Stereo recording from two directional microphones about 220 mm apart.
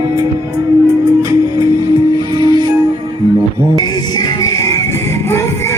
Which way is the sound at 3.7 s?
20° left (ahead or behind).